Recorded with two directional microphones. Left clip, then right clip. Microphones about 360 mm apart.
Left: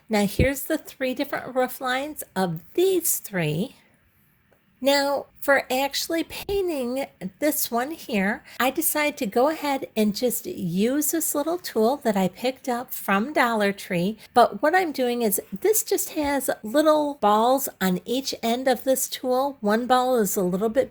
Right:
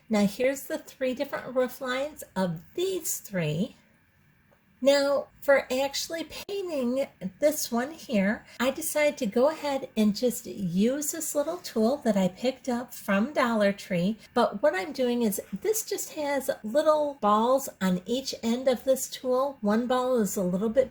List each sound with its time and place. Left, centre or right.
0.1 s speech: left
4.8 s speech: left